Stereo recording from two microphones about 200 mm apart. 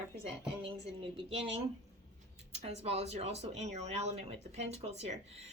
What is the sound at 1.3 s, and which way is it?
Speech, 30° right (ahead or behind).